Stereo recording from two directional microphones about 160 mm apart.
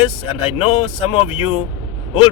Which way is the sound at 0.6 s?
40° left (ahead or behind).